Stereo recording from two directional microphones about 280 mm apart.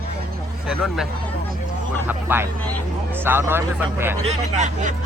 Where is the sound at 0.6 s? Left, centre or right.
Centre.